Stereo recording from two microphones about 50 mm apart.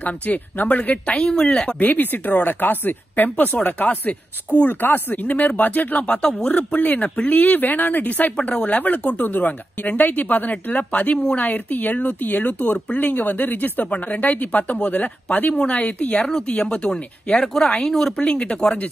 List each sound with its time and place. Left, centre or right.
0.0 s speech: left; by 18.8 s centre